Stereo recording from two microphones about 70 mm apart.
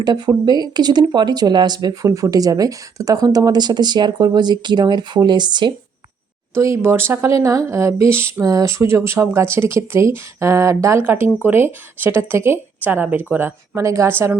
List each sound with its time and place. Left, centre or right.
0.0 s speech: right
2.0 s speech: right
6.5 s speech: right
7.3 s speech: right
8.4 s speech: right
11.0 s speech: right
12.8 s speech: right
13.8 s speech: right
14.1 s speech: right